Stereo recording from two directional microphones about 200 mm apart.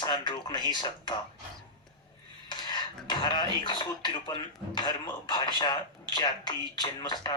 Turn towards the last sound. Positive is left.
turn(degrees=20)  # may be behind; listen again after turning